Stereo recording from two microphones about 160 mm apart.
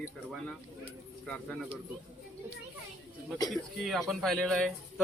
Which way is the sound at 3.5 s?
Centre (ahead or behind).